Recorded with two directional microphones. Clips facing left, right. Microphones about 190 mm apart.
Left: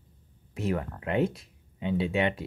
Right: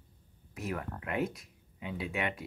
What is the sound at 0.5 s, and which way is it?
Speech, 25° left (ahead or behind).